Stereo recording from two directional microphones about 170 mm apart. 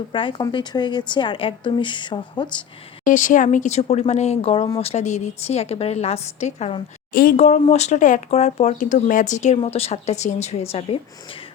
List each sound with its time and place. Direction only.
0.1 s a woman's voice: 30° left (ahead or behind)
3.0 s a woman's voice: 50° left (ahead or behind)
7.1 s a woman's voice: 60° left (ahead or behind)
7.3 s a woman's voice: 40° left (ahead or behind)